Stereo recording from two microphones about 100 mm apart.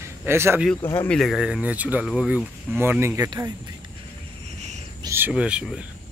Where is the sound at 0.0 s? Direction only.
25° right (ahead or behind).